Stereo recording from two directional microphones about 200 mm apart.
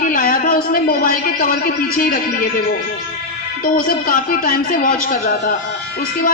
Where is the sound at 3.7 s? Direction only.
45° left (ahead or behind).